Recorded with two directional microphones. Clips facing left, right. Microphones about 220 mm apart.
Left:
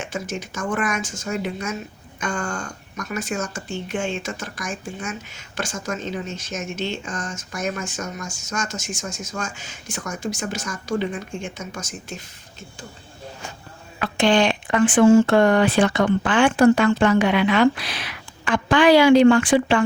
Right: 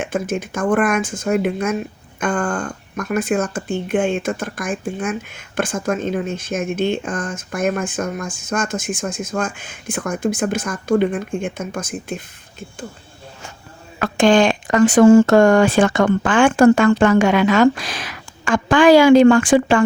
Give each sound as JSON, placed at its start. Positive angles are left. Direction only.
{"t": 0.0, "sound": "speech", "side_deg": -55}
{"t": 14.0, "sound": "speech", "side_deg": -50}